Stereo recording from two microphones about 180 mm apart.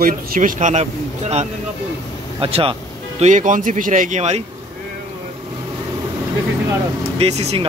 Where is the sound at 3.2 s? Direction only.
45° right (ahead or behind).